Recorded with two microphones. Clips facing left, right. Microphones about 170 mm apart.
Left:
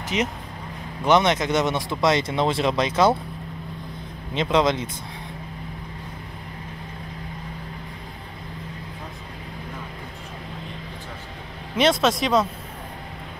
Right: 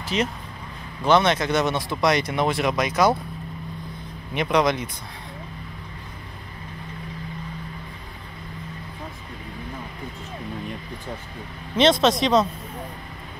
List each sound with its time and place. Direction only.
0.0 s speech: 20° left (ahead or behind)
4.3 s speech: 25° left (ahead or behind)
11.7 s speech: 5° left (ahead or behind)